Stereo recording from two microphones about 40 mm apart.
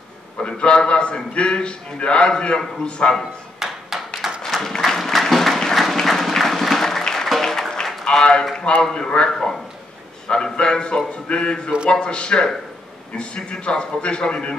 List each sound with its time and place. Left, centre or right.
0.4 s a man's voice: left
3.5 s music: centre
4.4 s a sound: centre
4.8 s applause: centre
5.8 s music: centre
8.0 s run: left
8.9 s a man's voice: left
9.3 s speech: centre
10.2 s a man's voice: left